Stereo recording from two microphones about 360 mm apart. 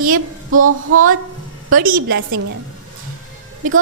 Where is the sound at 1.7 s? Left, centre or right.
Right.